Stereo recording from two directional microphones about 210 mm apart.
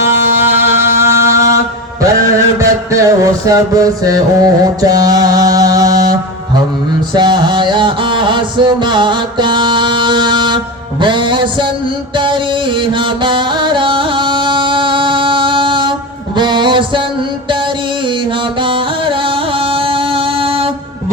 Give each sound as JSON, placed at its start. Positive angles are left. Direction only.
{"t": 0.3, "sound": "music", "side_deg": -10}
{"t": 2.6, "sound": "music", "side_deg": -15}
{"t": 7.1, "sound": "a sound", "side_deg": -20}
{"t": 11.0, "sound": "music", "side_deg": -20}
{"t": 18.6, "sound": "music", "side_deg": -25}